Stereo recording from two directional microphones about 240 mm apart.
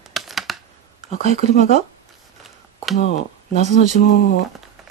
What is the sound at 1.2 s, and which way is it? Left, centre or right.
Speech, right.